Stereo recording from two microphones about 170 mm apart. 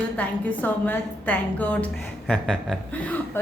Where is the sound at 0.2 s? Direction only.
10° left (ahead or behind).